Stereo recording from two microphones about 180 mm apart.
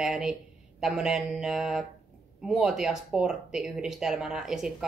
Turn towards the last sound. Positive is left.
turn(degrees=0)  # may be behind; listen again after turning